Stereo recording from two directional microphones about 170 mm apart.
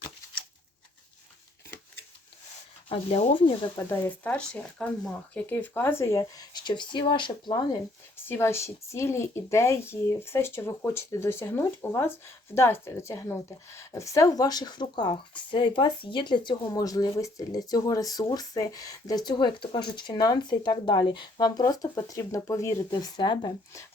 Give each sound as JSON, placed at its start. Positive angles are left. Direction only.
{"t": 2.9, "sound": "speech", "side_deg": 35}
{"t": 3.8, "sound": "speech", "side_deg": 15}
{"t": 8.2, "sound": "speech", "side_deg": 15}